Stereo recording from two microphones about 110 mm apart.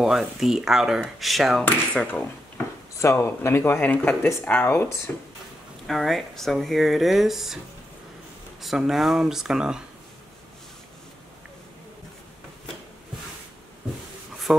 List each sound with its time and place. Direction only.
0.0 s speech: 5° right (ahead or behind)
1.6 s speech: 15° left (ahead or behind)
5.9 s speech: centre (ahead or behind)
8.5 s speech: 5° right (ahead or behind)
14.5 s speech: 5° right (ahead or behind)